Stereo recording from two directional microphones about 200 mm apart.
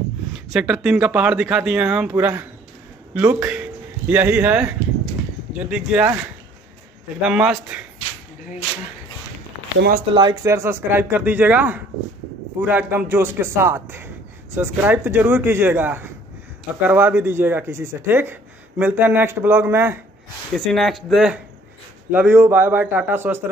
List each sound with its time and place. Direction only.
0.5 s speech: 5° right (ahead or behind)
9.8 s speech: 50° right (ahead or behind)
10.1 s speech: 20° right (ahead or behind)
20.5 s speech: centre (ahead or behind)